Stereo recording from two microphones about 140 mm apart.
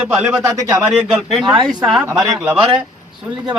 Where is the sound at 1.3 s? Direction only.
Centre (ahead or behind).